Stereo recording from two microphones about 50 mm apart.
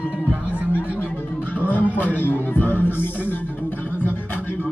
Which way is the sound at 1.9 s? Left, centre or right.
Left.